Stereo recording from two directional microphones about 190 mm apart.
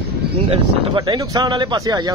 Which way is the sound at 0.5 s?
25° right (ahead or behind).